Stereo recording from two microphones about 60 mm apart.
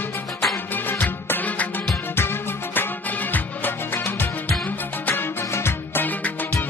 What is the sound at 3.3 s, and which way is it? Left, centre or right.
Music, left.